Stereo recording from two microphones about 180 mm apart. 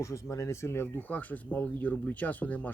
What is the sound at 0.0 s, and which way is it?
Speech, 15° left (ahead or behind).